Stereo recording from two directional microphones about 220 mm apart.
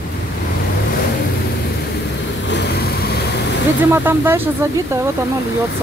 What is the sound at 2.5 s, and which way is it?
Vehicle, 50° left (ahead or behind).